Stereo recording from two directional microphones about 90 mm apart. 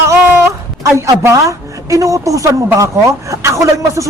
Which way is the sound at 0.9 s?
35° right (ahead or behind).